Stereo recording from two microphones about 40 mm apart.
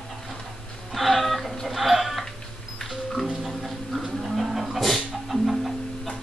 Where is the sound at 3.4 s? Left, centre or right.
Centre.